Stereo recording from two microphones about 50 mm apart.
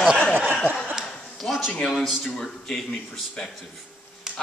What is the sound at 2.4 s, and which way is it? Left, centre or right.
A man's voice, centre.